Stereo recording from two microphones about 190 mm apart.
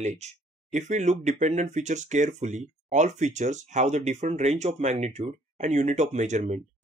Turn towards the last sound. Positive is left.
turn(degrees=-40)  # may be behind; listen again after turning